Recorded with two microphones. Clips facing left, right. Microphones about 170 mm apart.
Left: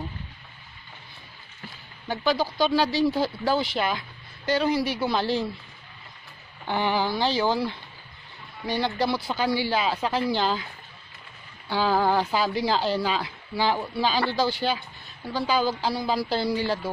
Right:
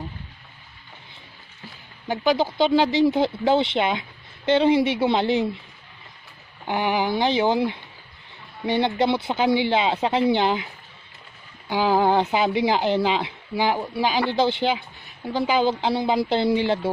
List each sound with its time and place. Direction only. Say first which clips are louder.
2.0 s speech: right 4 dB; 20° right (ahead or behind)
6.7 s speech: right 2 dB; 15° right (ahead or behind)
11.7 s speech: right 3 dB; 15° right (ahead or behind)